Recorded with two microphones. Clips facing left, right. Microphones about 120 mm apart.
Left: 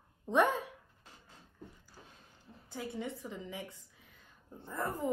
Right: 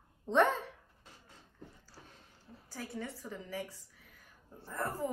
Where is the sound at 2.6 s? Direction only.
20° left (ahead or behind).